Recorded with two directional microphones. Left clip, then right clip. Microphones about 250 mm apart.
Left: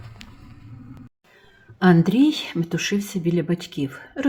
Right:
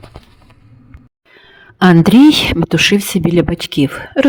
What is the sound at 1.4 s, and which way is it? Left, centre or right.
Speech, right.